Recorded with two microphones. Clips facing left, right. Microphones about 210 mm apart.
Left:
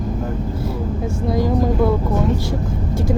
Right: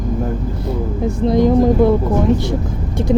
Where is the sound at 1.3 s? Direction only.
20° right (ahead or behind).